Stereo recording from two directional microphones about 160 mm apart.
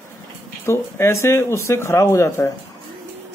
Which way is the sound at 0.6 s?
15° left (ahead or behind).